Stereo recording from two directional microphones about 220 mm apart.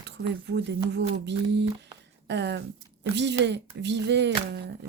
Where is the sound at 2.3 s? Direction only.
50° right (ahead or behind).